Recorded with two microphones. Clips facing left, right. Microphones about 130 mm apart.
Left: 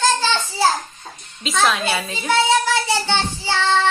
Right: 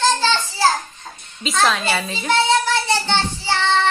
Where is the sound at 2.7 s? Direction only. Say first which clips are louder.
Even; 15° left (ahead or behind).